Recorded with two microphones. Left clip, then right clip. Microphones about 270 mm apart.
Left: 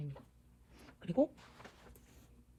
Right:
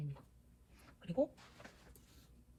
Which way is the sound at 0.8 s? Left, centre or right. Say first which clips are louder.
Left 4 dB; left.